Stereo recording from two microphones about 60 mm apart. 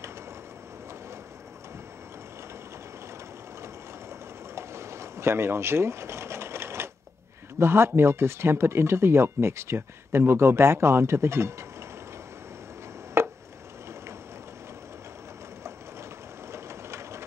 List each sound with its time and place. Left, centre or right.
4.6 s a sound: right
7.5 s speech: right
13.2 s chopping: right
16.5 s train: right